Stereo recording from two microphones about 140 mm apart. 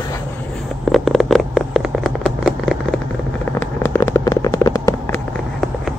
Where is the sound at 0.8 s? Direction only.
Centre (ahead or behind).